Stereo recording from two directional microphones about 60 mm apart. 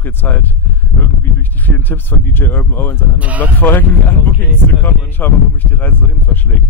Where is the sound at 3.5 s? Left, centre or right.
Left.